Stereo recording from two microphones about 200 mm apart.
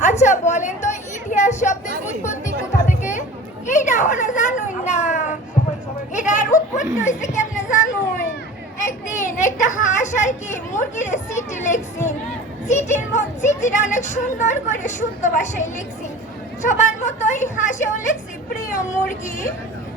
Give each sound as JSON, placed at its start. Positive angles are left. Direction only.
{"t": 0.0, "sound": "chatter", "side_deg": 35}
{"t": 3.7, "sound": "children playing", "side_deg": 40}
{"t": 6.1, "sound": "chatter", "side_deg": 40}
{"t": 7.0, "sound": "a woman's voice", "side_deg": 35}
{"t": 7.7, "sound": "a sound", "side_deg": 40}
{"t": 9.2, "sound": "a woman's voice", "side_deg": 40}